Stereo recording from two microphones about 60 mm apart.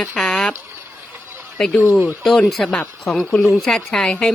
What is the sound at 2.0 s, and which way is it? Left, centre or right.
A woman's voice, centre.